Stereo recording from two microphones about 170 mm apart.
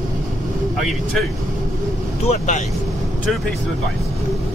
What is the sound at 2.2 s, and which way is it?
Speech, 45° left (ahead or behind).